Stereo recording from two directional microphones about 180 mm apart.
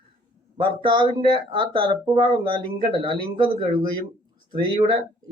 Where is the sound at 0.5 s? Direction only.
25° right (ahead or behind).